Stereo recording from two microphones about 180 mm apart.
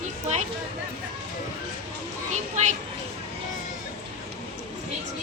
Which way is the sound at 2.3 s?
40° right (ahead or behind).